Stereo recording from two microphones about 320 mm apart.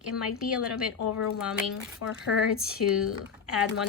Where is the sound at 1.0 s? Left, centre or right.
Left.